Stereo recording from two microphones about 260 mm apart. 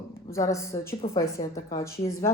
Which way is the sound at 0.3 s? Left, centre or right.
Centre.